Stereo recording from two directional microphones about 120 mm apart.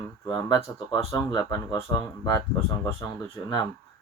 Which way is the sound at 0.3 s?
35° left (ahead or behind).